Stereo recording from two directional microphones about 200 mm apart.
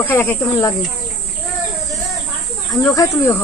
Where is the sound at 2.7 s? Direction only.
15° left (ahead or behind).